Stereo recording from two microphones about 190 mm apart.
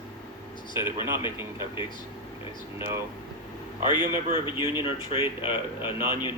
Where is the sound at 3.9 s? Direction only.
25° left (ahead or behind).